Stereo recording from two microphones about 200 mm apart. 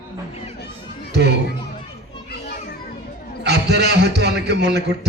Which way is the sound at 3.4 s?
55° right (ahead or behind).